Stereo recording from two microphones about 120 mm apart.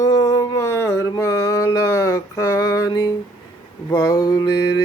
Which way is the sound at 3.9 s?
30° left (ahead or behind).